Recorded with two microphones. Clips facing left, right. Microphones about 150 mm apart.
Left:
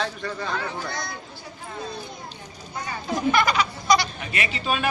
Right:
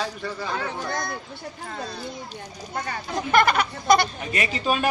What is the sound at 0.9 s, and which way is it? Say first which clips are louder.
Speech: right 4 dB; 50° right (ahead or behind).